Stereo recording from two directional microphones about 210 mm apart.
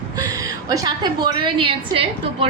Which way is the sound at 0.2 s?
15° right (ahead or behind).